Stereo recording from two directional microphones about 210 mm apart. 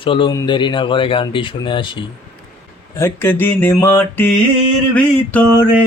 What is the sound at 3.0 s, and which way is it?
Mantra, 10° left (ahead or behind).